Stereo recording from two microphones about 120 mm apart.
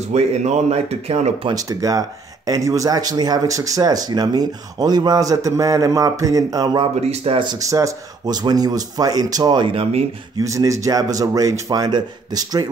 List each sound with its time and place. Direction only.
0.1 s speech: 70° right (ahead or behind)
1.5 s speech: 30° right (ahead or behind)
7.0 s speech: 60° right (ahead or behind)
7.6 s speech: 30° right (ahead or behind); by 10.0 s 50° right (ahead or behind)
10.3 s speech: 30° right (ahead or behind)